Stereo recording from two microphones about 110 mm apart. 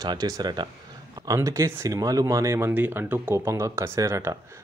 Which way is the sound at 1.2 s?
30° right (ahead or behind).